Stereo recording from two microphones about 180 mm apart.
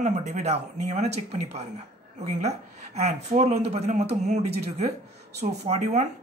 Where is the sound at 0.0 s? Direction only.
40° right (ahead or behind).